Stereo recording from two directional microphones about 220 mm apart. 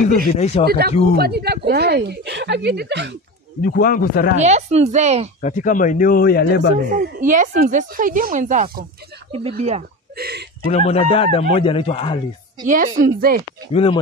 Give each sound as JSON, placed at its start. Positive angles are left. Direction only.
{"t": 0.2, "sound": "speech", "side_deg": 30}
{"t": 0.7, "sound": "speech", "side_deg": -45}
{"t": 3.6, "sound": "speech", "side_deg": 40}
{"t": 4.4, "sound": "speech", "side_deg": -30}
{"t": 5.4, "sound": "speech", "side_deg": 35}
{"t": 6.9, "sound": "speech", "side_deg": -35}
{"t": 10.1, "sound": "a sound", "side_deg": -45}
{"t": 10.7, "sound": "speech", "side_deg": 25}
{"t": 12.6, "sound": "speech", "side_deg": -35}
{"t": 13.7, "sound": "speech", "side_deg": 25}